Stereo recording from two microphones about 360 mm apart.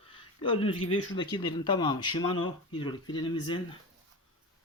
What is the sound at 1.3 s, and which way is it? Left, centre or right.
Speech, centre.